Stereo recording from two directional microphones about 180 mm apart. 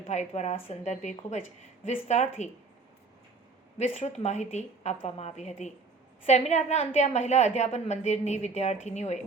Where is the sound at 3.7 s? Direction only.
35° left (ahead or behind).